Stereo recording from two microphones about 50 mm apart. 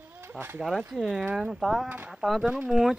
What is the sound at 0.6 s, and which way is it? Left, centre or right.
Speech, centre.